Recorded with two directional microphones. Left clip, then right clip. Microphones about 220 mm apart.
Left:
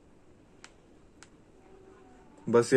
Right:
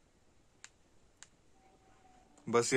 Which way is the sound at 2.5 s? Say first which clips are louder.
Left 6 dB; 25° right (ahead or behind).